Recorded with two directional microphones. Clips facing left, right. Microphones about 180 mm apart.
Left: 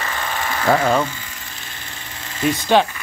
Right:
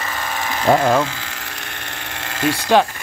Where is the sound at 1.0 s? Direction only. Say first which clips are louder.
Right 2 dB; 90° right; by 2.7 s 75° right (ahead or behind).